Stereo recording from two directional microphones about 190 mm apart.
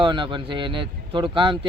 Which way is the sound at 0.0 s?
25° right (ahead or behind).